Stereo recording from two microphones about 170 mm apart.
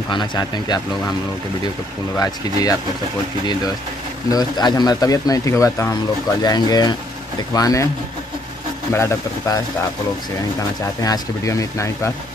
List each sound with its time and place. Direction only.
0.1 s speech: 25° left (ahead or behind)
2.1 s speech: 20° left (ahead or behind)
4.3 s speech: 25° left (ahead or behind)
8.9 s speech: 15° left (ahead or behind)
11.0 s speech: 20° left (ahead or behind)